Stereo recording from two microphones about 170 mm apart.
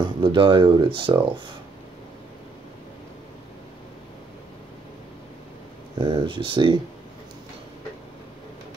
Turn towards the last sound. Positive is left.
turn(degrees=-30)  # may be behind; listen again after turning